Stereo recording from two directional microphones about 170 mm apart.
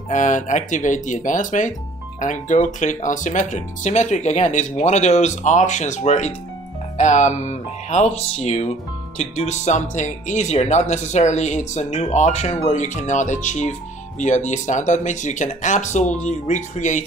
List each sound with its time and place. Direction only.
0.1 s speech: 50° left (ahead or behind)